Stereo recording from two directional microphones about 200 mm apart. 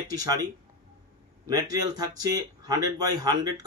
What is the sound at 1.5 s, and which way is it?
Speech, 20° right (ahead or behind).